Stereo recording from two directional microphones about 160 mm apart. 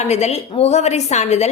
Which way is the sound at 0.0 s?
45° left (ahead or behind).